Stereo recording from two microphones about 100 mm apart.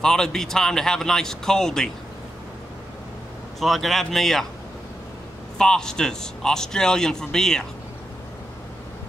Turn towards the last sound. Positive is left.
turn(degrees=5)  # may be behind; listen again after turning